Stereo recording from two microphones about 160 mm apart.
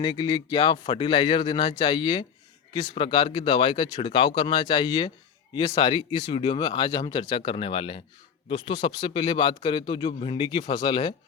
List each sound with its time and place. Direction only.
0.0 s speech: 30° left (ahead or behind)